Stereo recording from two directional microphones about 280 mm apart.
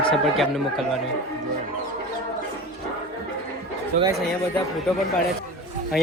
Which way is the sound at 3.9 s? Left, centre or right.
Right.